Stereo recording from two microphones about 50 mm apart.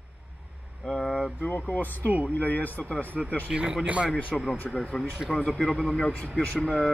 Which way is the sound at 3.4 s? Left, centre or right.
Centre.